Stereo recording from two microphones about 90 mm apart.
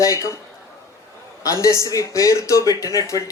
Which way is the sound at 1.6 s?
35° left (ahead or behind).